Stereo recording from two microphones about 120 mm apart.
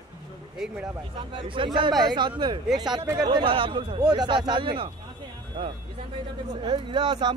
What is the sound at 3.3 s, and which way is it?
Speech, 45° right (ahead or behind).